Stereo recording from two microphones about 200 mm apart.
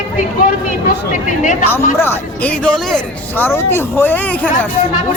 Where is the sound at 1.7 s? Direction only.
10° left (ahead or behind).